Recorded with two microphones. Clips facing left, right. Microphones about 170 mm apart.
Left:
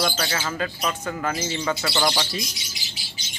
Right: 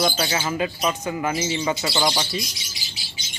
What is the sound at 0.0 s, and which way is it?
Speech, 20° right (ahead or behind).